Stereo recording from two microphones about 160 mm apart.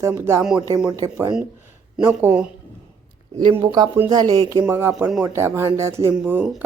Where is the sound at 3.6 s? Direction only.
25° right (ahead or behind).